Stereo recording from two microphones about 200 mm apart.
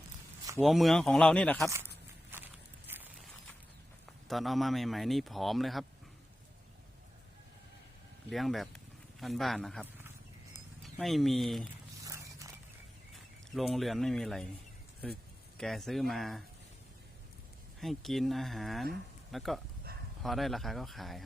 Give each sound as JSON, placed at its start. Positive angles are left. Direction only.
{"t": 0.6, "sound": "speech", "side_deg": 0}
{"t": 2.3, "sound": "walk", "side_deg": -10}
{"t": 4.3, "sound": "speech", "side_deg": 0}
{"t": 8.3, "sound": "speech", "side_deg": 0}
{"t": 10.8, "sound": "speech", "side_deg": 0}
{"t": 12.0, "sound": "horse", "side_deg": -15}
{"t": 13.1, "sound": "speech", "side_deg": 0}
{"t": 15.5, "sound": "speech", "side_deg": 0}
{"t": 17.7, "sound": "speech", "side_deg": 0}